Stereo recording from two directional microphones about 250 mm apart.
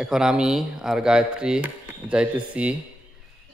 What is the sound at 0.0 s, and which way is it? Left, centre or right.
A man's voice, centre.